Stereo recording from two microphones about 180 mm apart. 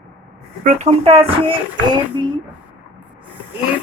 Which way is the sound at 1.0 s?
30° right (ahead or behind).